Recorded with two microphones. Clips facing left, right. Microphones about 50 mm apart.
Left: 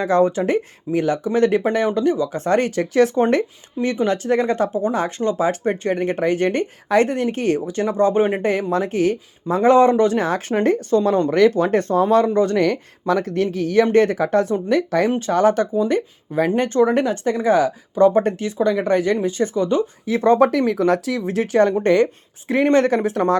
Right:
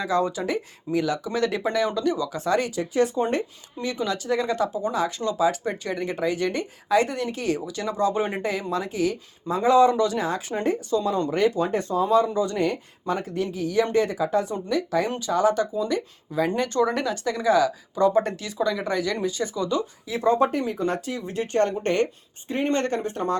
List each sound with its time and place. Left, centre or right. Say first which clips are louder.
0.0 s speech: left 7 dB; left
3.8 s speech: left 7 dB; left
8.4 s speech: left 7 dB; left
10.2 s speech: left 7 dB; left
11.3 s speech: left 7 dB; left
20.1 s speech: left 6 dB; left
22.4 s speech: left 8 dB; left